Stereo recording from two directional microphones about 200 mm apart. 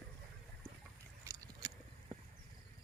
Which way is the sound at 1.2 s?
20° right (ahead or behind).